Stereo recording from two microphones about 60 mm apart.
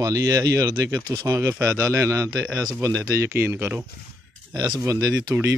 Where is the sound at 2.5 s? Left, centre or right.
Right.